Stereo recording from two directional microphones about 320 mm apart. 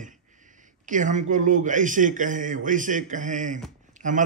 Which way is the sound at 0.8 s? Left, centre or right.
Right.